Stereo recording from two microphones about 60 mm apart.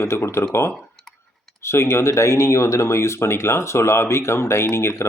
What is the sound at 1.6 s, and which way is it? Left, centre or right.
Speech, left.